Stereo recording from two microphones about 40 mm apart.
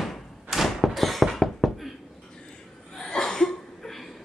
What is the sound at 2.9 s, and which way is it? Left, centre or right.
Chuckle, centre.